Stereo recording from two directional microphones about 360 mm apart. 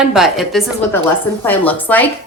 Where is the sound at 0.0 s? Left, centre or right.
Centre.